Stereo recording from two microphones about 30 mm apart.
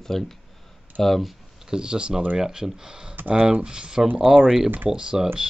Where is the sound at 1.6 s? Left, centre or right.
Right.